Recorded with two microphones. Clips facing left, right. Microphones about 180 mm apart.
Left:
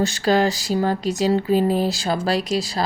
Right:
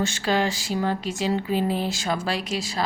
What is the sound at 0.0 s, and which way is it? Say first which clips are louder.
A woman's voice: left 5 dB; 40° left (ahead or behind).